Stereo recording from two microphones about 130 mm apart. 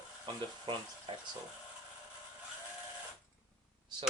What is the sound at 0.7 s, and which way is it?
Speech, 35° right (ahead or behind).